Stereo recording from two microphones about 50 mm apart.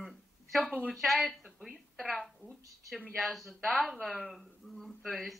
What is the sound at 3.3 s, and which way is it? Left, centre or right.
A woman's voice, centre.